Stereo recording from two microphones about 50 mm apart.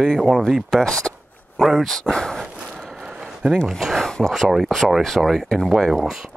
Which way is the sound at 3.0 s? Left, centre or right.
Centre.